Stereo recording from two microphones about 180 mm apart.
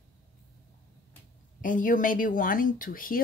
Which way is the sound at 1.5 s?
45° left (ahead or behind).